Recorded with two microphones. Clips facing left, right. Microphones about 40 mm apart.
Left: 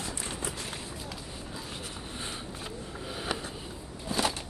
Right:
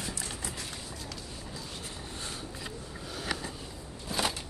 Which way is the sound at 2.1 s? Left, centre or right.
Left.